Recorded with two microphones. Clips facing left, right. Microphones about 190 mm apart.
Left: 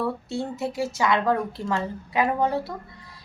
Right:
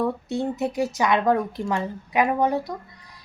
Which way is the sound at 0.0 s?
20° right (ahead or behind).